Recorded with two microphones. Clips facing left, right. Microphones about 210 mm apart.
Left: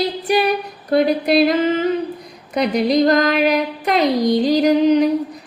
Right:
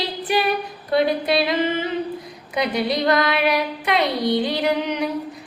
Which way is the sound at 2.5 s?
40° left (ahead or behind).